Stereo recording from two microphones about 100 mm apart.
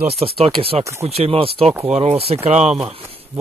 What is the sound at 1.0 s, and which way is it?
Speech, 90° right.